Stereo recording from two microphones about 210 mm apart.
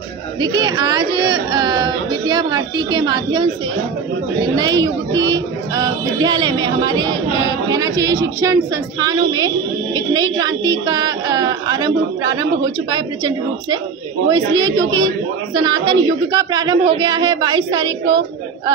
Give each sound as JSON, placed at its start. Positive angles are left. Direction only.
{"t": 0.4, "sound": "speech", "side_deg": -20}
{"t": 4.6, "sound": "a woman's voice", "side_deg": -20}